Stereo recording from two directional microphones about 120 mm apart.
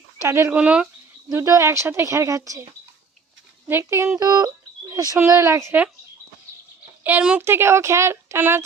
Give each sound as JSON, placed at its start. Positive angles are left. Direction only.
{"t": 0.2, "sound": "speech", "side_deg": -25}
{"t": 0.5, "sound": "speech", "side_deg": -10}
{"t": 1.3, "sound": "speech", "side_deg": -25}
{"t": 3.7, "sound": "speech", "side_deg": -20}
{"t": 7.0, "sound": "a woman's voice", "side_deg": -10}